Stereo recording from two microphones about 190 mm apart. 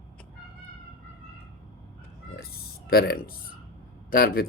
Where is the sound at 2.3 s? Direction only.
55° left (ahead or behind).